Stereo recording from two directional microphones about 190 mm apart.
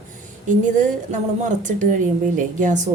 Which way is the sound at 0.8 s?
40° right (ahead or behind).